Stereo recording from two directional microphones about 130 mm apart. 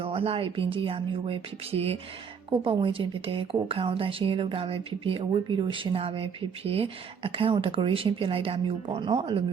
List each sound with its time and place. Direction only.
0.0 s a woman's voice: 45° right (ahead or behind)